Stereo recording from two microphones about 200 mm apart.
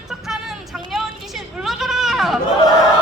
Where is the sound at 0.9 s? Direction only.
Centre (ahead or behind).